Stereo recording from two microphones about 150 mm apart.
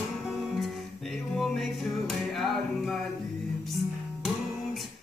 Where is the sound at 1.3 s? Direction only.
Centre (ahead or behind).